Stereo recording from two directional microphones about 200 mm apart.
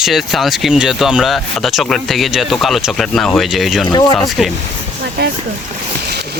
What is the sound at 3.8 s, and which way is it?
Speech, 20° left (ahead or behind).